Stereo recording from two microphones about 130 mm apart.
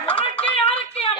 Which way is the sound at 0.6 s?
45° left (ahead or behind).